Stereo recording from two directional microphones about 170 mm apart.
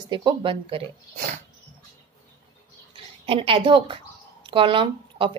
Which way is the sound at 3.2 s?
30° right (ahead or behind).